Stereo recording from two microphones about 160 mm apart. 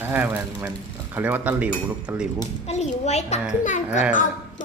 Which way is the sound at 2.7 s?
45° left (ahead or behind).